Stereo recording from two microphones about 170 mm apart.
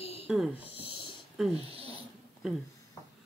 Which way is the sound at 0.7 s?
35° left (ahead or behind).